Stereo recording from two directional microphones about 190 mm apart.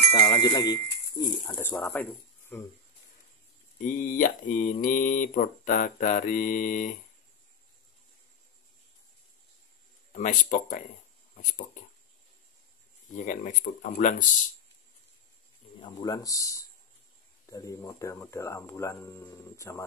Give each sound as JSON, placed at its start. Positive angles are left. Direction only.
{"t": 0.1, "sound": "speech", "side_deg": 15}
{"t": 3.7, "sound": "speech", "side_deg": 45}
{"t": 10.1, "sound": "speech", "side_deg": 40}
{"t": 13.1, "sound": "speech", "side_deg": 40}
{"t": 15.8, "sound": "speech", "side_deg": 20}